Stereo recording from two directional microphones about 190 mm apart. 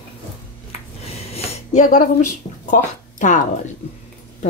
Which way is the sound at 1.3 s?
40° left (ahead or behind).